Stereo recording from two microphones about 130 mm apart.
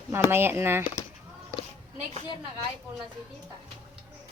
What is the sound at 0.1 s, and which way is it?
Speech, 15° right (ahead or behind).